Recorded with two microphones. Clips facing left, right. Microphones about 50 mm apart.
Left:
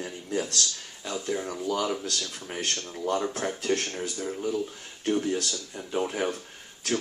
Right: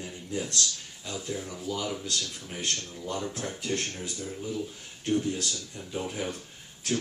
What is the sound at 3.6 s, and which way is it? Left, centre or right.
Speech, left.